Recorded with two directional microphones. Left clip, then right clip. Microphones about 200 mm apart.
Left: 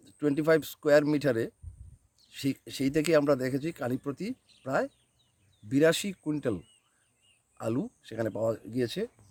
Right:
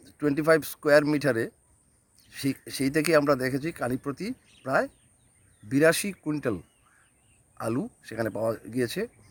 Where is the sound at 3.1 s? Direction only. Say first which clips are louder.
Right 3 dB; centre (ahead or behind).